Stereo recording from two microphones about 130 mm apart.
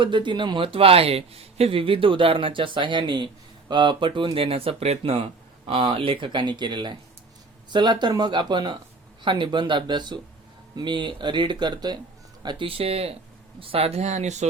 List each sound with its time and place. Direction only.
0.0 s speech: 40° right (ahead or behind); by 14.4 s 60° right (ahead or behind)